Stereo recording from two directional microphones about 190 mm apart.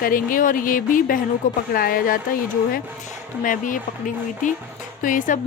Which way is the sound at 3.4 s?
45° left (ahead or behind).